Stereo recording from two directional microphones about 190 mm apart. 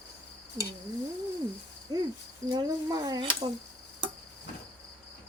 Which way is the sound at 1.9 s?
20° right (ahead or behind).